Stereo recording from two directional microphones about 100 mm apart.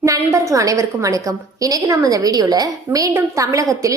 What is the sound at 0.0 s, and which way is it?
A woman's voice, 30° right (ahead or behind).